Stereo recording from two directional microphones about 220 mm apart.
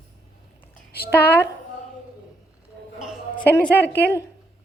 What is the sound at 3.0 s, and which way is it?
A woman's voice, centre (ahead or behind).